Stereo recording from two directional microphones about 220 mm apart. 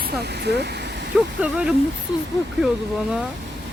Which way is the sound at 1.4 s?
5° right (ahead or behind).